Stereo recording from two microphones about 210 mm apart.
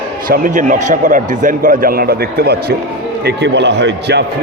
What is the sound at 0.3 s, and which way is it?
Speech, 40° right (ahead or behind).